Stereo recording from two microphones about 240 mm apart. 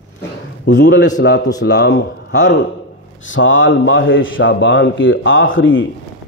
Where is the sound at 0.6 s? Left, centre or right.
Left.